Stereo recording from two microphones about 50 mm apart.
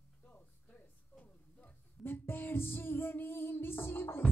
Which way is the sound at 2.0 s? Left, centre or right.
Left.